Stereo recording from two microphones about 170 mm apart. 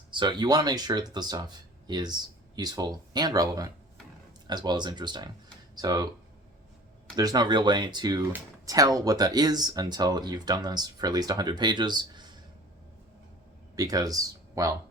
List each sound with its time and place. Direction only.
0.1 s speech: 25° right (ahead or behind)
7.2 s speech: 25° right (ahead or behind)
13.7 s speech: 20° right (ahead or behind)